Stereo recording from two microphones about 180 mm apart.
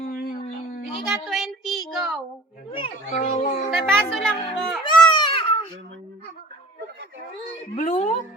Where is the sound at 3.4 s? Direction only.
45° left (ahead or behind).